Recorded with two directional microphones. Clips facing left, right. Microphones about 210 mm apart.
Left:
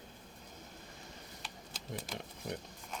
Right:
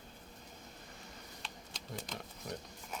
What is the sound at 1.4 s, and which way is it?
Shuffling cards, 5° left (ahead or behind).